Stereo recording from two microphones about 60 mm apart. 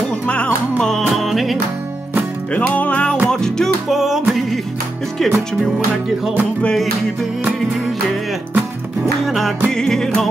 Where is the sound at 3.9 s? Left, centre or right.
Centre.